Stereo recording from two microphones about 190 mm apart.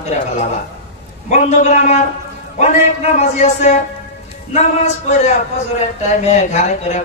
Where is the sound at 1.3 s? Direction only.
40° left (ahead or behind).